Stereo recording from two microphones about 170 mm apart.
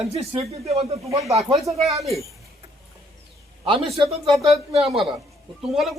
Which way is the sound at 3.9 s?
30° right (ahead or behind).